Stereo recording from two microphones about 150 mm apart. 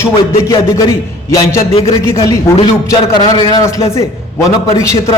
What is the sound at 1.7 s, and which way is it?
Speech, 40° left (ahead or behind).